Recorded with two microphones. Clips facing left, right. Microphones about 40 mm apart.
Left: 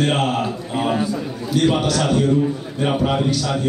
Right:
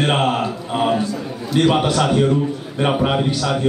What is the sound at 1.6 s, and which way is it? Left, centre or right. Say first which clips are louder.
A man's voice: right 2 dB; right.